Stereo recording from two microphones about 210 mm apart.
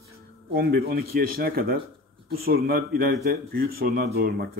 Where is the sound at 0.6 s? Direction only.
45° right (ahead or behind).